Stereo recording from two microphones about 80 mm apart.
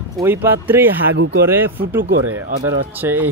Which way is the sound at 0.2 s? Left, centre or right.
Right.